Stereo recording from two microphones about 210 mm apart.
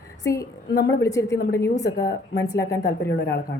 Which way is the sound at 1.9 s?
50° left (ahead or behind).